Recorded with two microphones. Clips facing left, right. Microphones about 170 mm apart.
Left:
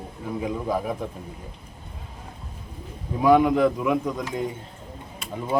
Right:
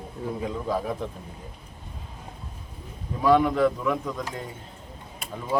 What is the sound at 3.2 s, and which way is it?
Speech, 15° left (ahead or behind).